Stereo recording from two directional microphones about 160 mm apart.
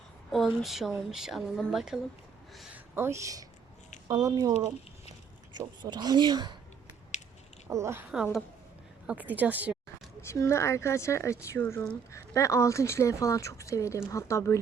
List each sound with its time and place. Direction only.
0.3 s speech: centre (ahead or behind)
2.6 s a sound: 10° right (ahead or behind)
4.1 s speech: 25° right (ahead or behind)
5.5 s speech: 25° right (ahead or behind)
7.7 s a woman's voice: 15° right (ahead or behind)
8.1 s a woman's voice: centre (ahead or behind)
10.2 s speech: 15° left (ahead or behind)